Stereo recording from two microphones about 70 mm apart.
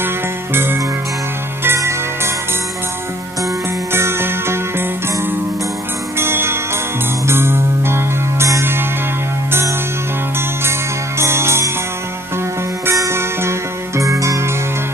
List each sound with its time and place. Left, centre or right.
0.5 s music: right
3.9 s music: right
11.2 s music: right
12.8 s music: right